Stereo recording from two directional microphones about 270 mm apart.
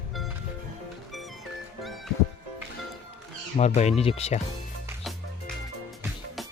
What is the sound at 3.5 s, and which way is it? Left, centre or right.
Speech, left.